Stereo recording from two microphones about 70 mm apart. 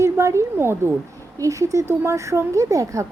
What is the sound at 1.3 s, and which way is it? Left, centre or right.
Speech, right.